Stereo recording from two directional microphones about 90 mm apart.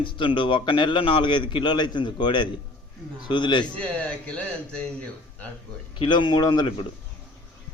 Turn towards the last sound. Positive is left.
turn(degrees=55)  # may be behind; listen again after turning